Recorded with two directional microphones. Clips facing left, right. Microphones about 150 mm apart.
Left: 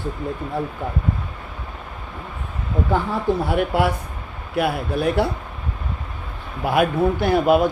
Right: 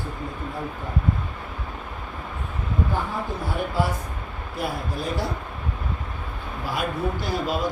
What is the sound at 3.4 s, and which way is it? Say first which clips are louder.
A man's voice: left 6 dB; 70° left (ahead or behind).